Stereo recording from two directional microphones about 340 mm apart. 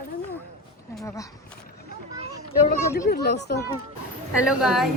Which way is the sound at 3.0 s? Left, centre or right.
Left.